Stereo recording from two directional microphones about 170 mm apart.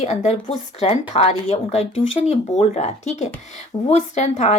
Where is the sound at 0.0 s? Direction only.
40° left (ahead or behind).